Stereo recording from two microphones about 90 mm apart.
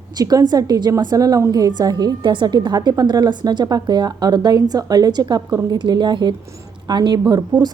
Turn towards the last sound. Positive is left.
turn(degrees=-50)  # may be behind; listen again after turning